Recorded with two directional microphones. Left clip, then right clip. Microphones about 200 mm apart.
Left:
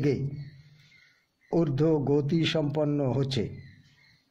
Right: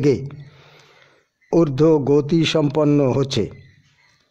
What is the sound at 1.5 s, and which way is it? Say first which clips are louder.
A man's voice: right 10 dB; 30° right (ahead or behind).